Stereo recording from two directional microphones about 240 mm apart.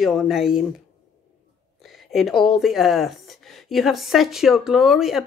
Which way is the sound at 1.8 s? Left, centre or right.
Centre.